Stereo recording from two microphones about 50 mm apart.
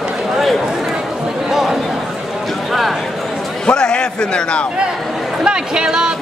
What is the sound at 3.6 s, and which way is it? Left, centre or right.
A man's voice, centre.